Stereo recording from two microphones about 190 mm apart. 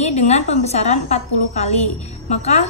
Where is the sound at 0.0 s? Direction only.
35° left (ahead or behind).